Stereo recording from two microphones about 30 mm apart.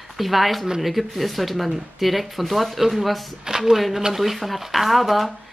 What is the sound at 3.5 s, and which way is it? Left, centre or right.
Speech, centre.